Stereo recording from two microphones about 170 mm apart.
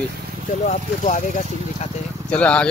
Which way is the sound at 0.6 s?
45° left (ahead or behind).